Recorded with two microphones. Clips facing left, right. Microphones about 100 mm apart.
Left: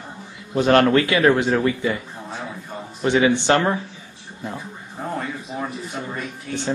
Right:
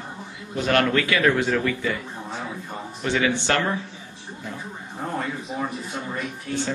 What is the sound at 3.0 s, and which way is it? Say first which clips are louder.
Speech: left 6 dB; 25° left (ahead or behind).